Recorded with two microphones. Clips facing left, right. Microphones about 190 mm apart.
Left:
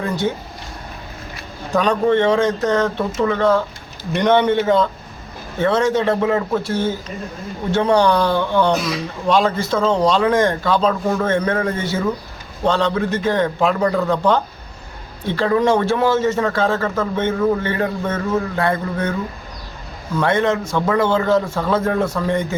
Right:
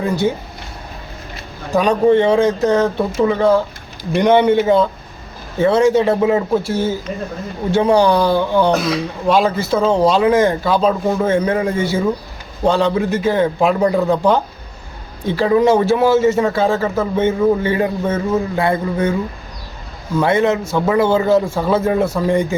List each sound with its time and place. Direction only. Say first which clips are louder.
1.7 s a man's voice: right 3 dB; 10° right (ahead or behind)
13.6 s a man's voice: right 3 dB; 20° right (ahead or behind)
20.1 s a man's voice: right 3 dB; 10° right (ahead or behind)